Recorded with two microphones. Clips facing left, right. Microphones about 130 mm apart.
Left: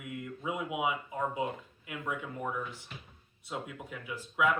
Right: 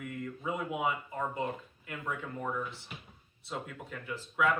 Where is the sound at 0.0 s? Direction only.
10° left (ahead or behind).